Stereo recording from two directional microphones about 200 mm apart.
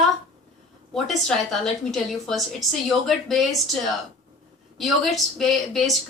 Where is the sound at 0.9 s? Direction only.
Centre (ahead or behind).